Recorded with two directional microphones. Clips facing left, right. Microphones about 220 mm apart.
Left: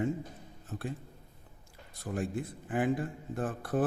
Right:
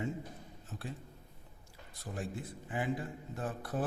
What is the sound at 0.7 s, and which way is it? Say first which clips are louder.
Speech: left 6 dB; 55° left (ahead or behind).